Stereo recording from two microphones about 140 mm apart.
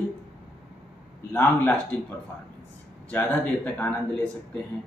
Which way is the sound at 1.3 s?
15° left (ahead or behind).